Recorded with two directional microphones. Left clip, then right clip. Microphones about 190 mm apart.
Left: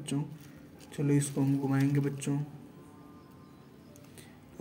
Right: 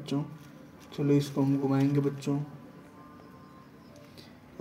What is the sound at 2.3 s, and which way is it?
Speech, 35° left (ahead or behind).